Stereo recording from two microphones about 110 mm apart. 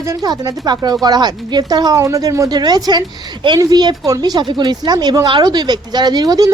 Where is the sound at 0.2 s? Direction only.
35° right (ahead or behind).